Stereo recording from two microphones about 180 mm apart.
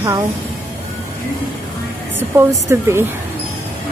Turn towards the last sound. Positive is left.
turn(degrees=-15)  # may be behind; listen again after turning